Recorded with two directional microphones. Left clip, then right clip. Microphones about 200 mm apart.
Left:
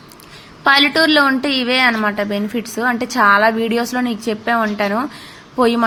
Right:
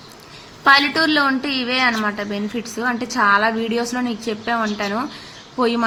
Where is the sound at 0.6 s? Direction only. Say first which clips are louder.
Left 2 dB; 20° left (ahead or behind).